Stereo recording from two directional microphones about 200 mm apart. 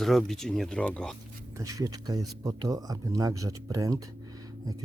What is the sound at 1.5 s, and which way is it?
Speech, 15° right (ahead or behind).